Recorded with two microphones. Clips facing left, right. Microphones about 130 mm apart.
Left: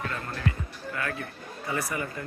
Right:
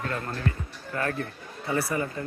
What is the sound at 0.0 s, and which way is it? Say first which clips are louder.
Speech: right 2 dB; 40° right (ahead or behind).